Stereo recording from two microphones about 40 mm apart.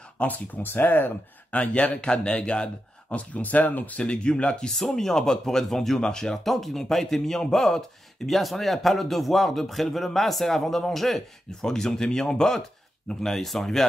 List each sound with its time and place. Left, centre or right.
0.2 s speech: left
0.7 s speech: left
1.5 s a man's voice: left
3.2 s speech: left
4.7 s speech: centre
11.7 s speech: centre